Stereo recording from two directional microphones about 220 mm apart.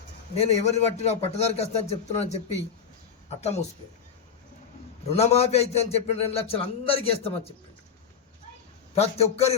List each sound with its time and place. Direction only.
0.3 s a man's voice: 30° left (ahead or behind)
5.1 s a man's voice: 30° left (ahead or behind)
9.0 s a man's voice: 30° left (ahead or behind)